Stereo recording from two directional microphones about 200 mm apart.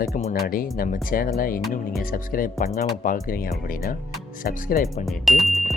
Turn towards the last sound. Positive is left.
turn(degrees=0)  # may be behind; listen again after turning